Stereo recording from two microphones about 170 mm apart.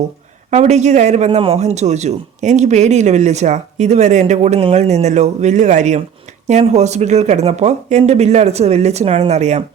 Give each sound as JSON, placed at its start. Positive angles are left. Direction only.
{"t": 0.5, "sound": "a man's voice", "side_deg": -40}